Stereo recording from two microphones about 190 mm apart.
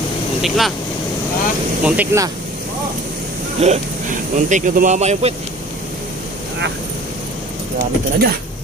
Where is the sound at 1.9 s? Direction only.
10° right (ahead or behind).